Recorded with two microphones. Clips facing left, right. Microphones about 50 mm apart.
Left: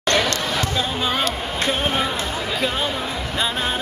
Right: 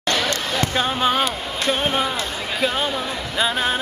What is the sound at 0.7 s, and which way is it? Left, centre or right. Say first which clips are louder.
Speech: right 3 dB; right.